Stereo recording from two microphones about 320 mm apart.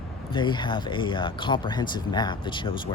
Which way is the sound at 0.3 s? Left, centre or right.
Centre.